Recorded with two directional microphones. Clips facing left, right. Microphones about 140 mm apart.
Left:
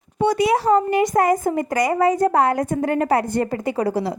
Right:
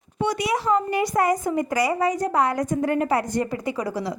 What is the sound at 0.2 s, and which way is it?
Speech, 30° left (ahead or behind).